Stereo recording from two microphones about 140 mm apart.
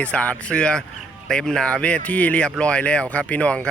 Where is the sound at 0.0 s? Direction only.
10° left (ahead or behind).